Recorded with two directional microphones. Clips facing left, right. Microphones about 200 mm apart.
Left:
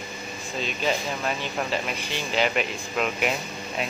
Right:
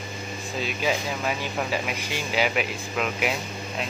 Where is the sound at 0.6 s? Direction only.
5° right (ahead or behind).